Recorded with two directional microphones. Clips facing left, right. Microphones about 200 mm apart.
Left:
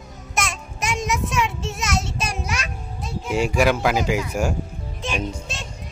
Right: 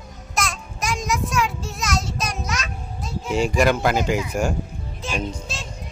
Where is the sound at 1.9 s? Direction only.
25° left (ahead or behind).